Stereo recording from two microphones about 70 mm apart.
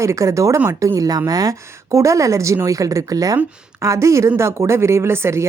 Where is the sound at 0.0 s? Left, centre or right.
Right.